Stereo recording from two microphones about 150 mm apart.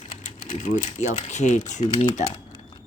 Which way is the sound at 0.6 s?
55° left (ahead or behind).